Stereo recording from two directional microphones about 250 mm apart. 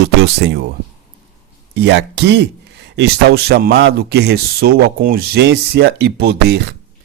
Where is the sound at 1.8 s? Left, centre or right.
Right.